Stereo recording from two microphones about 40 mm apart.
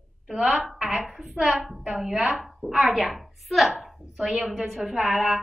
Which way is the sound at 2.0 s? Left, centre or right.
Centre.